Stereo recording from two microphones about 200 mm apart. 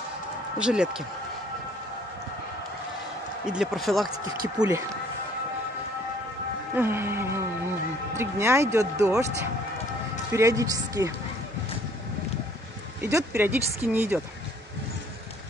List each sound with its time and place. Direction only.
0.6 s speech: 5° right (ahead or behind)
3.4 s speech: centre (ahead or behind)
4.1 s speech: 20° right (ahead or behind)
6.7 s music: 10° right (ahead or behind)
8.2 s speech: 15° right (ahead or behind)
13.0 s speech: 10° right (ahead or behind)